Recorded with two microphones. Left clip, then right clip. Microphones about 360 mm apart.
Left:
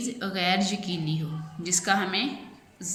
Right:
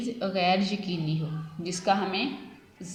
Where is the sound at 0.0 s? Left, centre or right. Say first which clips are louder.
Right 2 dB; centre.